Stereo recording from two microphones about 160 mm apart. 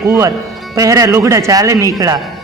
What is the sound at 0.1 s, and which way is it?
A man's voice, 20° right (ahead or behind).